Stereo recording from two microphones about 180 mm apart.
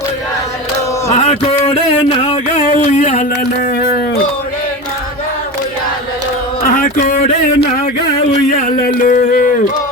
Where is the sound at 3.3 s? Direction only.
60° left (ahead or behind).